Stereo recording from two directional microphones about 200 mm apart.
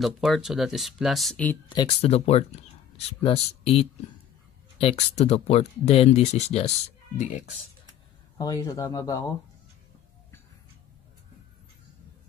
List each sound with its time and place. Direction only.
0.0 s speech: centre (ahead or behind)
1.7 s speech: 25° left (ahead or behind)
8.4 s speech: 20° left (ahead or behind)